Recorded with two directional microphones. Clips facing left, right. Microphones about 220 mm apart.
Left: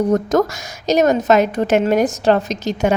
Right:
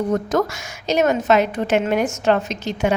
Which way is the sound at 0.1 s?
40° left (ahead or behind).